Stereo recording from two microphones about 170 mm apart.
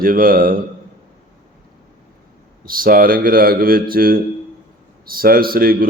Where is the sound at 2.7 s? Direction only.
55° right (ahead or behind).